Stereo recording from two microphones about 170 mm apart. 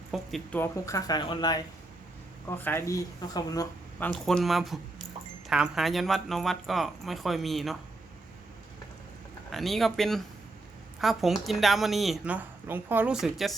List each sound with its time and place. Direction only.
0.1 s speech: centre (ahead or behind)
0.6 s speech: 20° left (ahead or behind)
2.6 s speech: 10° left (ahead or behind)
4.0 s speech: 5° left (ahead or behind)
9.5 s speech: centre (ahead or behind)